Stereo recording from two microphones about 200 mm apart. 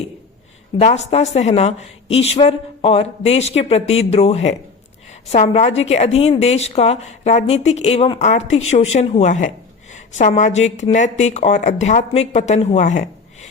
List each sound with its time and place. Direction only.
0.8 s a woman's voice: 30° left (ahead or behind)